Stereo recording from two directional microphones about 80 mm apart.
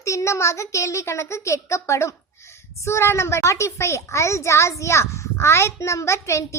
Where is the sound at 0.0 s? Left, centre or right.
Left.